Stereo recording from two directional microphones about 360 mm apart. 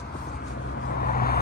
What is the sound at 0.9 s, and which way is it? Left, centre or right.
Vehicle, left.